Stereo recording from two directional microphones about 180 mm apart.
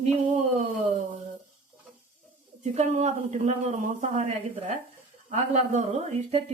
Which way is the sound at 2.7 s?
40° right (ahead or behind).